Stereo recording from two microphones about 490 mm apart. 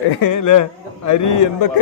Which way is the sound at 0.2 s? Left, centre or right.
Left.